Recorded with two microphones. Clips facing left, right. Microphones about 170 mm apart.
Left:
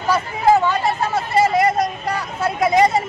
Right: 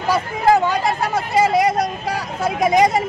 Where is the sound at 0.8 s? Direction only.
15° right (ahead or behind).